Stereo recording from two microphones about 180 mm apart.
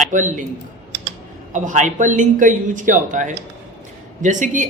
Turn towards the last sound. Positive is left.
turn(degrees=-45)  # may be behind; listen again after turning